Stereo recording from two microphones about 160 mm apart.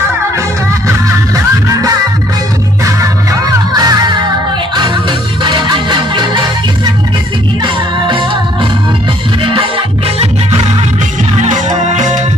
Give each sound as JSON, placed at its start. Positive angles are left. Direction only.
{"t": 2.8, "sound": "music", "side_deg": -20}
{"t": 5.4, "sound": "music", "side_deg": -30}
{"t": 9.4, "sound": "music", "side_deg": -35}
{"t": 11.4, "sound": "music", "side_deg": -50}